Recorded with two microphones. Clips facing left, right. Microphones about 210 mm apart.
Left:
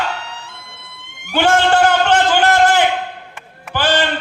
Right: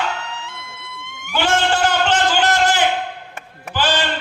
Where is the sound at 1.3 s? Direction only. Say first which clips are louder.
Left 5 dB; 55° left (ahead or behind).